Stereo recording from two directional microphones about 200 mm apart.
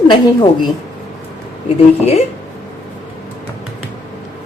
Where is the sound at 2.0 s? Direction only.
30° left (ahead or behind).